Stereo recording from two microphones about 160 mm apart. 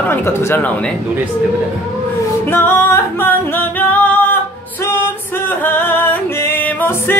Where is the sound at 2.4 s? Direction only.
15° left (ahead or behind).